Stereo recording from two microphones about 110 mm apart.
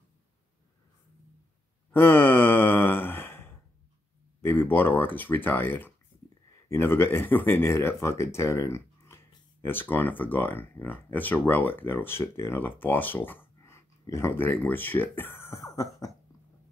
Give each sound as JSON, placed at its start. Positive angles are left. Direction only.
{"t": 1.9, "sound": "sigh", "side_deg": 20}
{"t": 4.4, "sound": "speech", "side_deg": 20}